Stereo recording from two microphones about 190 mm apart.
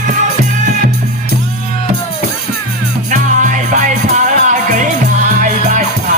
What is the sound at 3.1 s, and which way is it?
Music, 40° right (ahead or behind).